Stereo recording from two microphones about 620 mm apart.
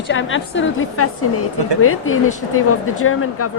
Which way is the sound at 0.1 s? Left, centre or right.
Centre.